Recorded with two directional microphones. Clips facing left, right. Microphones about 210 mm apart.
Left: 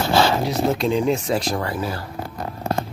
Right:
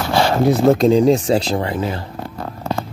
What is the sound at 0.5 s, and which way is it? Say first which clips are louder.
Speech: right 8 dB; 40° right (ahead or behind).